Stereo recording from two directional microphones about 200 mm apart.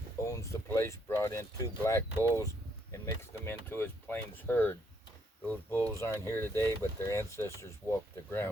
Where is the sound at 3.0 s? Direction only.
10° left (ahead or behind).